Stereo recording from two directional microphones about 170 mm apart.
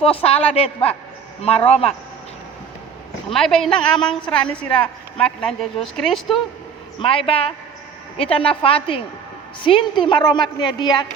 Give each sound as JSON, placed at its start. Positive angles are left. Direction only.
{"t": 0.0, "sound": "a man's voice", "side_deg": 35}
{"t": 3.3, "sound": "a woman's voice", "side_deg": 0}
{"t": 7.0, "sound": "a man's voice", "side_deg": 35}